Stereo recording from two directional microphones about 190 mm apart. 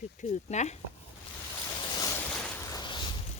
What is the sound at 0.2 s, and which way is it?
Speech, 35° left (ahead or behind).